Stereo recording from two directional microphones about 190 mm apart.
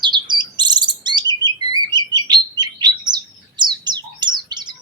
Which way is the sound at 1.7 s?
20° right (ahead or behind).